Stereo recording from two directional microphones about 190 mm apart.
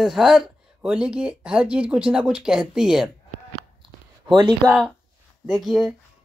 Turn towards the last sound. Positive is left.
turn(degrees=0)  # may be behind; listen again after turning